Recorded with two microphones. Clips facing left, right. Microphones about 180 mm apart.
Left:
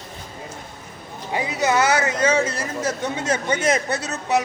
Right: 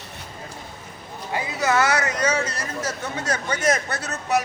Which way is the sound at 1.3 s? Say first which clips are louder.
Left 2 dB; 20° left (ahead or behind).